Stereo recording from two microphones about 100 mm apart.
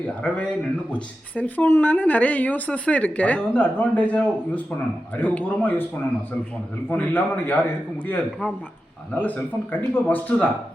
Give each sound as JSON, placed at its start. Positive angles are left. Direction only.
{"t": 0.2, "sound": "speech", "side_deg": 10}
{"t": 6.9, "sound": "speech", "side_deg": 20}